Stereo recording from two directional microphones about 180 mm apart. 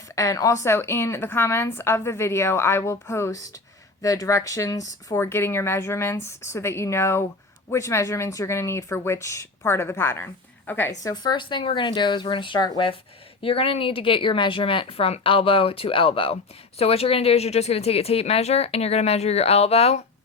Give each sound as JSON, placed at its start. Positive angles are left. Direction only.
{"t": 0.2, "sound": "speech", "side_deg": 20}